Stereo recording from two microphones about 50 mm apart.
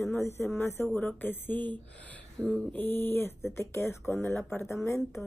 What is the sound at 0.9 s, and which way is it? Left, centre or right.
Speech, left.